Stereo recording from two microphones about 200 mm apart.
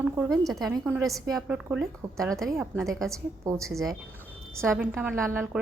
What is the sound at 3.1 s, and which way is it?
Speech, 15° right (ahead or behind).